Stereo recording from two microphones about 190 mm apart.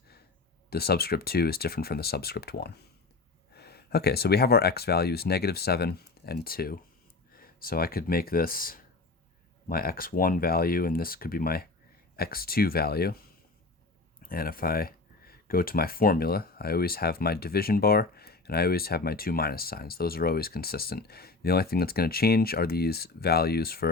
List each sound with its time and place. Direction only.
0.7 s speech: 55° left (ahead or behind)
14.3 s speech: 50° left (ahead or behind)